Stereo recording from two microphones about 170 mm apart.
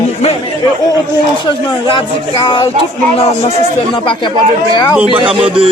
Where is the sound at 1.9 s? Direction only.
30° left (ahead or behind).